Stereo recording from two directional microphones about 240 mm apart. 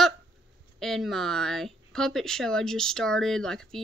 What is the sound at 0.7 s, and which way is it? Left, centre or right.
Speech, centre.